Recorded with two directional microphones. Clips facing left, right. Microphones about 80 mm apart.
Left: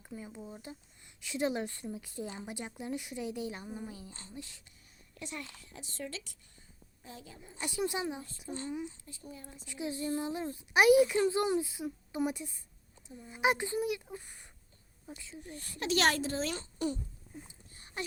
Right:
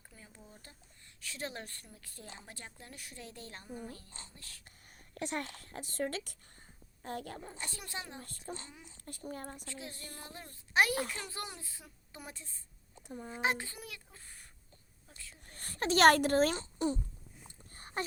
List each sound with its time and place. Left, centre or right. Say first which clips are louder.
0.1 s a woman's voice: left 13 dB; left
5.1 s a child's voice: right 5 dB; right
7.6 s a woman's voice: left 15 dB; centre
8.5 s speech: left 9 dB; right
9.6 s a woman's voice: left 11 dB; centre
13.0 s speech: right 5 dB; right
13.3 s a woman's voice: left 5 dB; centre
15.4 s a child's voice: right 1 dB; right
16.6 s speech: right 1 dB; right
17.5 s a sound: right 5 dB; right